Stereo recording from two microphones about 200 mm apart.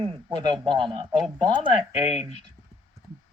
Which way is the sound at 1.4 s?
20° right (ahead or behind).